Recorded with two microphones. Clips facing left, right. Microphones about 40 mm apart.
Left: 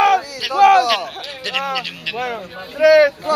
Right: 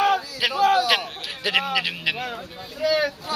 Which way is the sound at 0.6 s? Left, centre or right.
Left.